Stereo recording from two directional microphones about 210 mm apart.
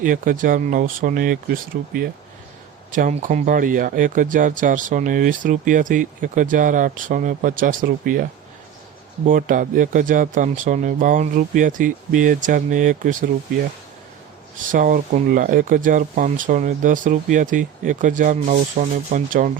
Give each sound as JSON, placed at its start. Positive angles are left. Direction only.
{"t": 0.0, "sound": "speech", "side_deg": -40}
{"t": 14.7, "sound": "speech", "side_deg": -40}